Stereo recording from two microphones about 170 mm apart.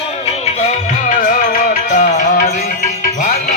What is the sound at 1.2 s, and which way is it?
Music, 45° left (ahead or behind).